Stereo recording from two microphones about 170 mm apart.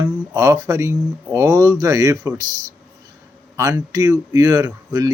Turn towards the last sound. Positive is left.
turn(degrees=-20)  # may be behind; listen again after turning